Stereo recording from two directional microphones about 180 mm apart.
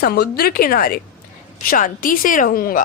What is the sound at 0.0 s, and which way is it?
A woman's voice, 60° left (ahead or behind).